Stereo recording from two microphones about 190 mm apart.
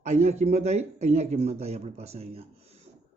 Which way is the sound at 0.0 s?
35° right (ahead or behind).